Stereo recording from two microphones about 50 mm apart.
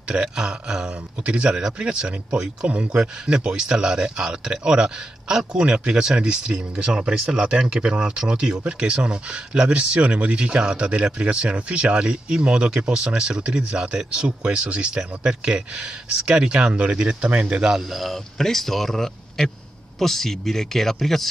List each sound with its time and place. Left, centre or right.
0.1 s speech: centre
17.7 s speech: centre